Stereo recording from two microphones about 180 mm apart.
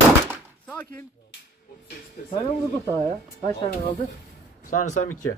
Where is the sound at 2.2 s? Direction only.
40° left (ahead or behind).